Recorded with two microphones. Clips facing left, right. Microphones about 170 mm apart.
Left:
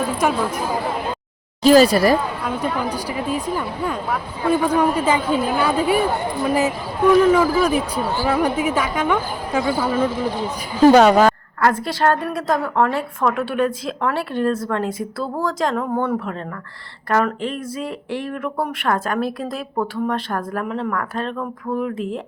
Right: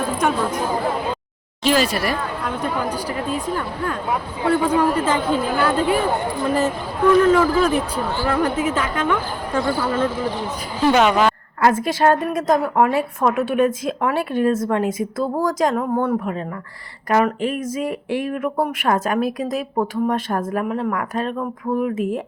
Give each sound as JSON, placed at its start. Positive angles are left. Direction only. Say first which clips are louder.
{"t": 0.2, "sound": "speech", "louder": "right 1 dB", "side_deg": 5}
{"t": 1.6, "sound": "a woman's voice", "louder": "left 7 dB", "side_deg": 40}
{"t": 2.4, "sound": "speech", "louder": "left 1 dB", "side_deg": 10}
{"t": 10.8, "sound": "a woman's voice", "louder": "left 5 dB", "side_deg": 40}
{"t": 11.6, "sound": "a woman's voice", "louder": "right 2 dB", "side_deg": -20}
{"t": 20.7, "sound": "a woman's voice", "louder": "right 1 dB", "side_deg": -10}